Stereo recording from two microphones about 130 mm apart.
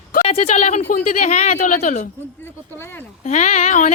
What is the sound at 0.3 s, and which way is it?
Speech, 55° left (ahead or behind).